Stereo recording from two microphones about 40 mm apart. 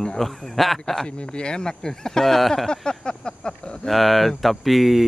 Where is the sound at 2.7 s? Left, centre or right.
Left.